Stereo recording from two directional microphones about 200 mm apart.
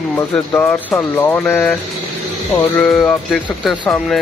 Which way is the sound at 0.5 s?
10° left (ahead or behind).